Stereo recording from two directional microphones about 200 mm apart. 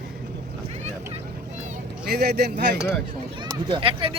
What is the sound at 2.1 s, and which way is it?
Speech, 55° right (ahead or behind).